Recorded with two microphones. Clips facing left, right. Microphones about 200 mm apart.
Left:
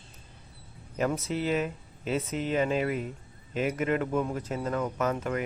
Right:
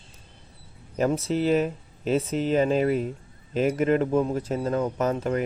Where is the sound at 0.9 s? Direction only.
35° right (ahead or behind).